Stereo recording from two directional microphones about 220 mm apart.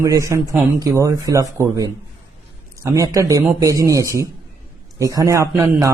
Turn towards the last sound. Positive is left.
turn(degrees=-15)  # may be behind; listen again after turning